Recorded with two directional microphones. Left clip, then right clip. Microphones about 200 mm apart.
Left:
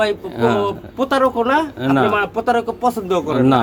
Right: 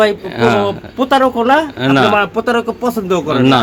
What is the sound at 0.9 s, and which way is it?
Speech, 45° right (ahead or behind).